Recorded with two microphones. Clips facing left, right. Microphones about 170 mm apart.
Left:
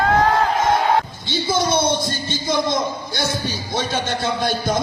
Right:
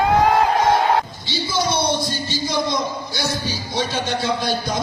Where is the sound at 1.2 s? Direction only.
50° left (ahead or behind).